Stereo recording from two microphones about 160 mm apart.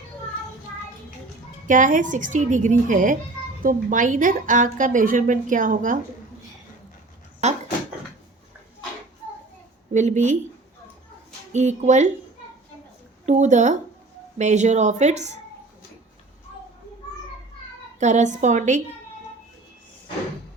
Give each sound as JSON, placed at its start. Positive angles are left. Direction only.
{"t": 1.6, "sound": "a woman's voice", "side_deg": -55}
{"t": 9.9, "sound": "a woman's voice", "side_deg": -50}
{"t": 11.5, "sound": "a woman's voice", "side_deg": -45}
{"t": 13.2, "sound": "a woman's voice", "side_deg": -50}
{"t": 18.0, "sound": "a woman's voice", "side_deg": -50}